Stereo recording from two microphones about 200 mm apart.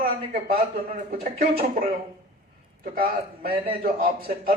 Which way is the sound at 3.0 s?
25° right (ahead or behind).